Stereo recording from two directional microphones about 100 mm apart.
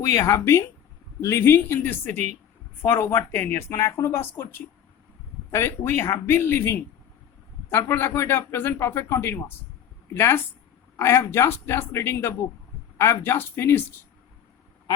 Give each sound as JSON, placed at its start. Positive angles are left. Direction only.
{"t": 0.0, "sound": "speech", "side_deg": 30}